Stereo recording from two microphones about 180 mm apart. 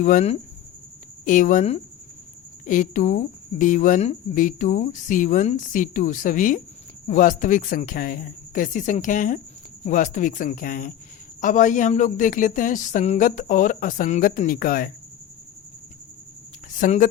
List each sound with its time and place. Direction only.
0.0 s speech: 45° left (ahead or behind)
16.8 s speech: 45° left (ahead or behind)